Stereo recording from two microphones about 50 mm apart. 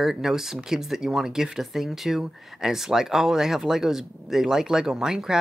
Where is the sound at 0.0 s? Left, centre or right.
Centre.